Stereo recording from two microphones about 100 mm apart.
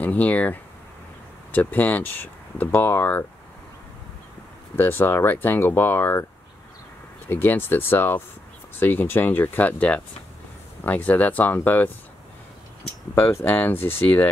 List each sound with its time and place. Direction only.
0.0 s speech: 15° left (ahead or behind)
4.7 s speech: 20° left (ahead or behind)
7.2 s speech: 20° left (ahead or behind)
13.1 s speech: 25° left (ahead or behind)